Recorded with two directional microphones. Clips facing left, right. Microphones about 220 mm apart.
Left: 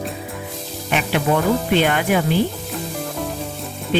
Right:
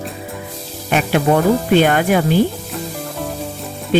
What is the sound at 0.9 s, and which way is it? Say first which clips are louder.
Speech: right 4 dB; 45° right (ahead or behind).